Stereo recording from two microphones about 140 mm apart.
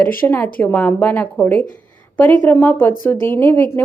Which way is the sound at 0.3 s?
10° left (ahead or behind).